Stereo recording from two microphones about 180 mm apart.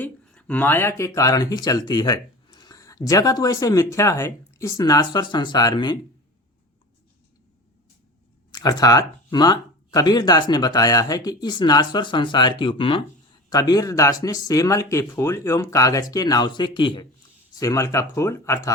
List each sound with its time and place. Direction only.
0.0 s speech: 5° left (ahead or behind); by 6.0 s 25° left (ahead or behind)
8.5 s speech: 20° left (ahead or behind)